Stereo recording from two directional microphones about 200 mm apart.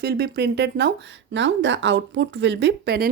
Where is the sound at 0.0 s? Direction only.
55° right (ahead or behind).